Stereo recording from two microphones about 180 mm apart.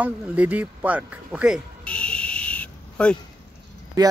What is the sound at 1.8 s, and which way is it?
Owl, 5° left (ahead or behind).